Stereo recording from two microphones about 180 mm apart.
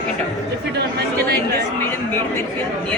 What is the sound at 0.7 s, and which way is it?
Speech, 60° right (ahead or behind).